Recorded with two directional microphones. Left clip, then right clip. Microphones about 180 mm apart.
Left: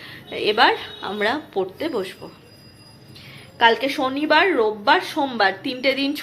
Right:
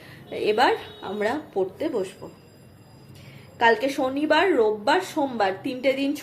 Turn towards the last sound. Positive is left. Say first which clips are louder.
# left 2 dB
turn(degrees=0)  # may be behind; listen again after turning